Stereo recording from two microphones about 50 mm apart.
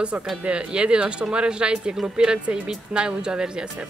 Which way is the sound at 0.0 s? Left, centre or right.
Right.